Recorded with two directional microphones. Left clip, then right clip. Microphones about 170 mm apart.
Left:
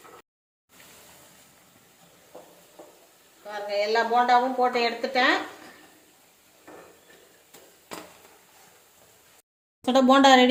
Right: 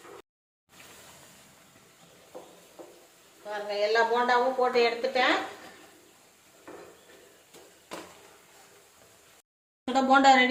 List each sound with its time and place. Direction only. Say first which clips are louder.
3.5 s a woman's voice: left 2 dB; 40° left (ahead or behind)
9.8 s speech: left 3 dB; 55° left (ahead or behind)